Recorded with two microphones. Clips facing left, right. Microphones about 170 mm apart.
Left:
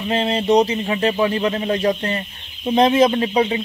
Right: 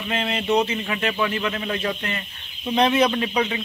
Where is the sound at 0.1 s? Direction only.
30° left (ahead or behind).